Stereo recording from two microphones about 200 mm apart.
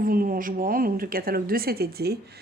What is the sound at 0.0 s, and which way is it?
A woman's voice, 45° right (ahead or behind).